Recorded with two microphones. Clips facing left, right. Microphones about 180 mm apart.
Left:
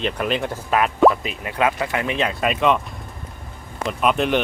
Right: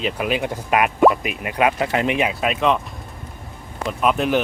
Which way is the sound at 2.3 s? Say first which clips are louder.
Even; centre (ahead or behind).